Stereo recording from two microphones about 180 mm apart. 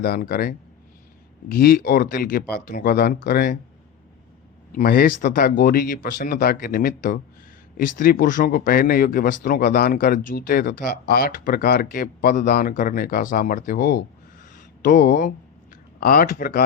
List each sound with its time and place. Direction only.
0.0 s speech: 55° left (ahead or behind)
4.7 s speech: 55° left (ahead or behind)